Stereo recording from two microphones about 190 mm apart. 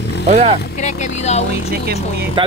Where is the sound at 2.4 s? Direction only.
25° right (ahead or behind).